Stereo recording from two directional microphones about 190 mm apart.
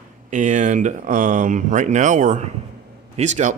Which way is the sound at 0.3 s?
40° right (ahead or behind).